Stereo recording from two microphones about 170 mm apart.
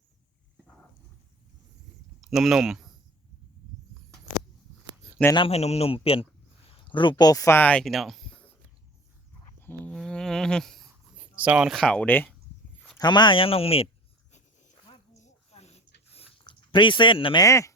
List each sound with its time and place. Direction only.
2.2 s speech: centre (ahead or behind)
5.3 s a man's voice: 30° left (ahead or behind); by 8.4 s 5° left (ahead or behind)
9.6 s a sound: 10° left (ahead or behind)
11.3 s speech: 5° right (ahead or behind); by 12.3 s 10° left (ahead or behind)
13.0 s a man's voice: 25° left (ahead or behind)
14.3 s a sound: 45° left (ahead or behind)
16.4 s speech: 30° left (ahead or behind)
17.4 s speech: 20° left (ahead or behind)